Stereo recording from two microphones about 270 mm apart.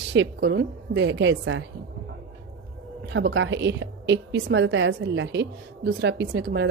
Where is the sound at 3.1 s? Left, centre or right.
Right.